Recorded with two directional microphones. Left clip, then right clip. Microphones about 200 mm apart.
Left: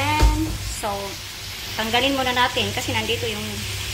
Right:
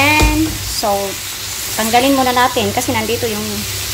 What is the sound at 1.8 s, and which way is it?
Sizzle, 20° right (ahead or behind).